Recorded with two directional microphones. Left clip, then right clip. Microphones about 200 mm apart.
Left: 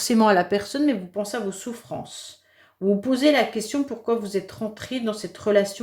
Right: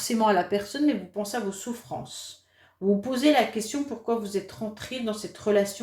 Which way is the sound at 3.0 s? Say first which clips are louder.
Left 3 dB; 40° left (ahead or behind).